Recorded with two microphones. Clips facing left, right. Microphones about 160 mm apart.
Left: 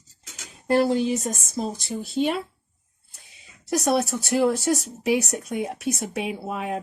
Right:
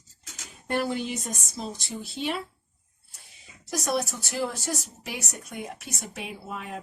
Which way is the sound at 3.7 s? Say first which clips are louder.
Left 6 dB; 65° left (ahead or behind).